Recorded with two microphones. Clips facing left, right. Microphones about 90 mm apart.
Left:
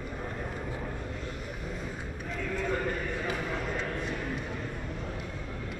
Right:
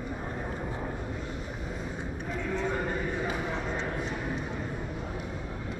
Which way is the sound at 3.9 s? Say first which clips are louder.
Right 1 dB; 15° right (ahead or behind).